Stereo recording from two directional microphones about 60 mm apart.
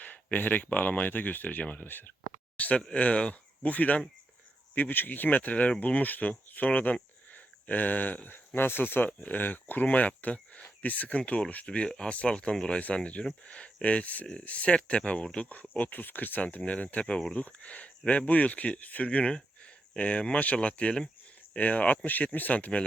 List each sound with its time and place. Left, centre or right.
0.0 s speech: left